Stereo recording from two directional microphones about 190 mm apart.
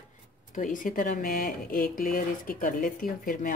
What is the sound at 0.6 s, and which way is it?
Speech, 45° left (ahead or behind).